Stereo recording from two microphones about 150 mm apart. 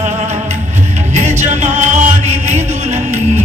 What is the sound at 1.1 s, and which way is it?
Music, 50° right (ahead or behind).